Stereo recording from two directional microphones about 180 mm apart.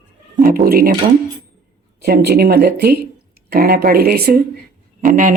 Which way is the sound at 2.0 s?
65° right (ahead or behind).